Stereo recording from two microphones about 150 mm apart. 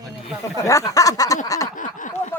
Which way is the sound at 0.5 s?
20° left (ahead or behind).